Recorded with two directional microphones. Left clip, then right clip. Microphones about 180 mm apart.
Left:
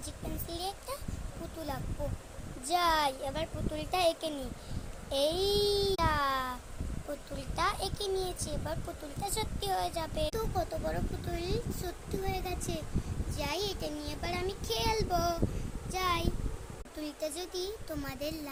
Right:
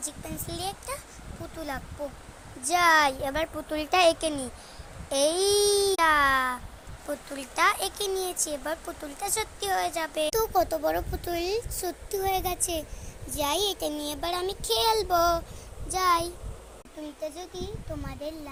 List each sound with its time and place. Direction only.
0.0 s babbling: 15° right (ahead or behind)
2.6 s a child's voice: 15° right (ahead or behind)
5.0 s babbling: 15° right (ahead or behind)
7.3 s a child's voice: 20° right (ahead or behind)
9.2 s babbling: 15° right (ahead or behind)
10.3 s a child's voice: 50° right (ahead or behind); by 16.3 s 35° right (ahead or behind)
17.0 s speech: 15° left (ahead or behind)